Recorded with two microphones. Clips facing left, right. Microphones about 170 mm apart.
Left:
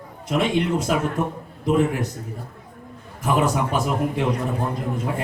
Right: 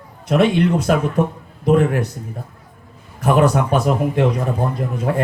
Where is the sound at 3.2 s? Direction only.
65° right (ahead or behind).